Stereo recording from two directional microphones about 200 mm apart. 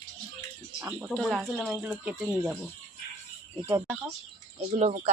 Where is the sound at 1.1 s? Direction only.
Centre (ahead or behind).